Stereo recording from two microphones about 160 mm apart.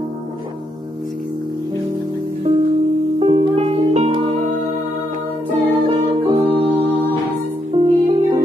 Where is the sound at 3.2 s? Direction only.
40° right (ahead or behind).